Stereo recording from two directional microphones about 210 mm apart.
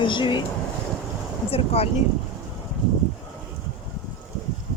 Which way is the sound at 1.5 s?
30° left (ahead or behind).